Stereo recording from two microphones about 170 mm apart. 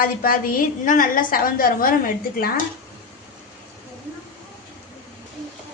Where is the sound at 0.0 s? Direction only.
55° left (ahead or behind).